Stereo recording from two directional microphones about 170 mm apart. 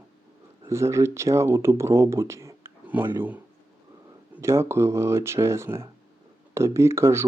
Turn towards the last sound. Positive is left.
turn(degrees=-15)  # may be behind; listen again after turning